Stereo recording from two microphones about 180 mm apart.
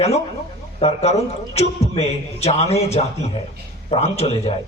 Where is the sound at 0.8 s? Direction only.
35° left (ahead or behind).